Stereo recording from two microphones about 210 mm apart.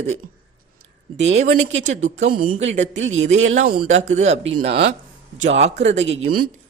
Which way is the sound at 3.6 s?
40° right (ahead or behind).